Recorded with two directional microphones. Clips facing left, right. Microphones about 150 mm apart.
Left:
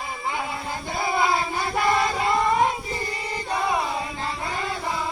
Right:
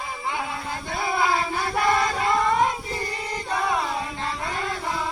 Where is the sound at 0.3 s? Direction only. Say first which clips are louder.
Left 1 dB; 5° left (ahead or behind).